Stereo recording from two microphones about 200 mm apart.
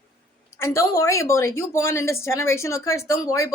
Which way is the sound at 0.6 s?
15° left (ahead or behind).